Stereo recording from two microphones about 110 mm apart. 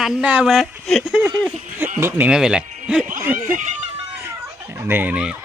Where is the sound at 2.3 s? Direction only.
10° right (ahead or behind).